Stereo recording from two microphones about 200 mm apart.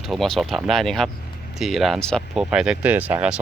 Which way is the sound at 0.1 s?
Centre (ahead or behind).